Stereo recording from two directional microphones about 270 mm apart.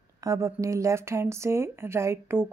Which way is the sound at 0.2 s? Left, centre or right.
Centre.